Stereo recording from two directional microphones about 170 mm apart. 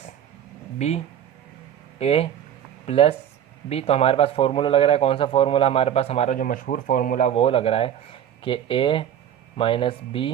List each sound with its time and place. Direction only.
0.8 s a man's voice: 40° left (ahead or behind)